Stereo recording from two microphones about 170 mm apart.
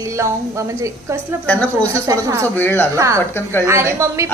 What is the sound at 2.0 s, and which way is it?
Speech, 20° right (ahead or behind).